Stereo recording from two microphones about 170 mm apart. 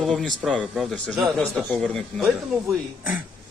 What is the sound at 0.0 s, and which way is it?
Speech, centre (ahead or behind).